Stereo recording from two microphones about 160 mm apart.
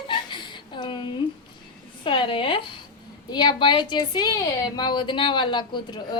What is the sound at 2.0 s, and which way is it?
A woman's voice, 30° left (ahead or behind).